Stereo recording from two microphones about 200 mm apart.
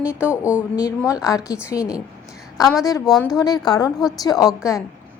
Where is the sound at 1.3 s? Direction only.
15° left (ahead or behind).